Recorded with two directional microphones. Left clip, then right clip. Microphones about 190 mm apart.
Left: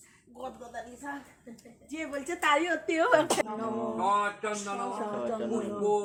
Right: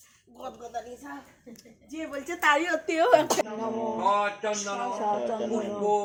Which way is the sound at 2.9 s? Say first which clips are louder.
Right 4 dB; 10° right (ahead or behind).